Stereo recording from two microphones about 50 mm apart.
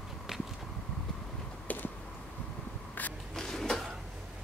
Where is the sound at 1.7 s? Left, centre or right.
Left.